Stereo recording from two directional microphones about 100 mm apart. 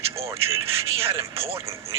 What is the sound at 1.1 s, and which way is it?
Speech, 25° right (ahead or behind).